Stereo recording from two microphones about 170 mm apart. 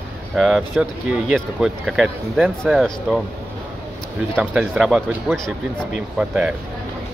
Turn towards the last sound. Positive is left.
turn(degrees=-5)  # may be behind; listen again after turning